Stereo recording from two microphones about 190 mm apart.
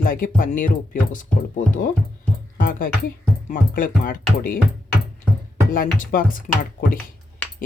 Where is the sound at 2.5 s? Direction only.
45° left (ahead or behind).